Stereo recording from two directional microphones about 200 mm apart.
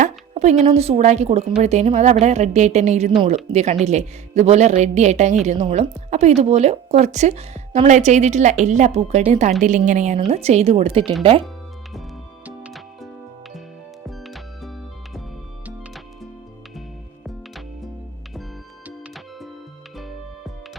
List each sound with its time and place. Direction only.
0.0 s music: 35° right (ahead or behind)
0.6 s speech: 30° right (ahead or behind)
12.5 s music: 5° right (ahead or behind)
14.1 s music: centre (ahead or behind)
18.9 s music: centre (ahead or behind)